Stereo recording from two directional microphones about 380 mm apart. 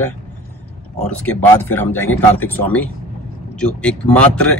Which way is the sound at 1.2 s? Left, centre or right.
Centre.